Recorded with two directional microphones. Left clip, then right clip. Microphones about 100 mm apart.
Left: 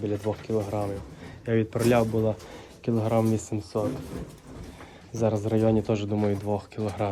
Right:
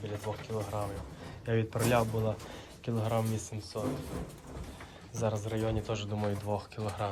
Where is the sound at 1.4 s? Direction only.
45° right (ahead or behind); by 3.5 s 20° right (ahead or behind).